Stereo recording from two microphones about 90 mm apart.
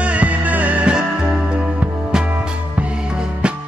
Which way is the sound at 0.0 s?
15° right (ahead or behind).